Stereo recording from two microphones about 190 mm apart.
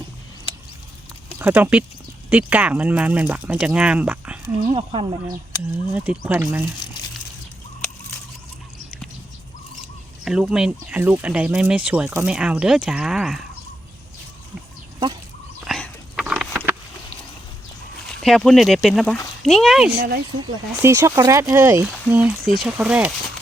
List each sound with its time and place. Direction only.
1.4 s speech: 10° right (ahead or behind)
4.6 s speech: 30° right (ahead or behind)
5.9 s speech: 10° right (ahead or behind)
10.2 s speech: 5° right (ahead or behind)
15.6 s a sound: centre (ahead or behind)
18.1 s speech: centre (ahead or behind)
20.8 s speech: 15° right (ahead or behind)
21.8 s speech: 5° right (ahead or behind)